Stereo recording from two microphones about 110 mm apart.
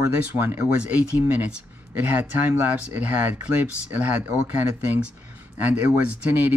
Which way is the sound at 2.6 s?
15° right (ahead or behind).